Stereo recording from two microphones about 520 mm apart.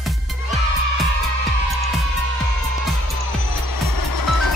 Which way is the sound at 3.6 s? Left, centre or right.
Left.